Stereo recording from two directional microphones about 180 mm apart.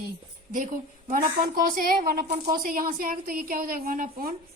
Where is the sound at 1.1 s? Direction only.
50° right (ahead or behind).